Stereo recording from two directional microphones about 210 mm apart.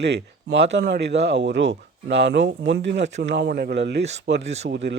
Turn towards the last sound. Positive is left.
turn(degrees=-55)  # may be behind; listen again after turning